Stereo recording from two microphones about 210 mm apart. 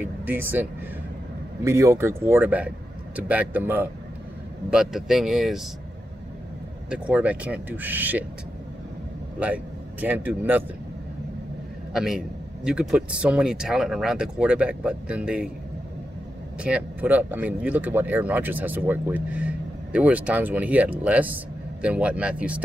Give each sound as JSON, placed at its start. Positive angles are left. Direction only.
{"t": 0.0, "sound": "speech", "side_deg": -10}
{"t": 6.9, "sound": "speech", "side_deg": -5}
{"t": 9.4, "sound": "speech", "side_deg": -5}
{"t": 11.9, "sound": "a man's voice", "side_deg": 0}
{"t": 16.6, "sound": "speech", "side_deg": -5}